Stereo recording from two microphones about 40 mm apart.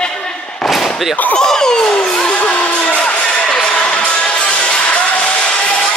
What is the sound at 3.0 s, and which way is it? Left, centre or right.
Music, left.